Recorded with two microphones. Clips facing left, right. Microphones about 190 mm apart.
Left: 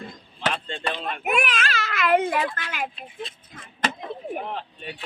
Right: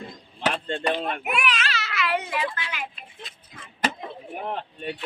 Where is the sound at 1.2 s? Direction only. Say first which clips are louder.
Left 2 dB; 45° left (ahead or behind).